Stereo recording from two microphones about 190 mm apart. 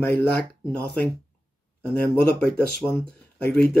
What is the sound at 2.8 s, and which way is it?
Speech, 10° left (ahead or behind).